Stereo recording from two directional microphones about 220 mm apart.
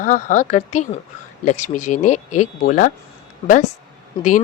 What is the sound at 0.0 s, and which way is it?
Speech, 35° left (ahead or behind).